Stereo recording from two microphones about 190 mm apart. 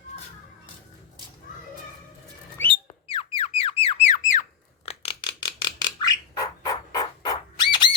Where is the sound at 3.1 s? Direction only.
30° left (ahead or behind).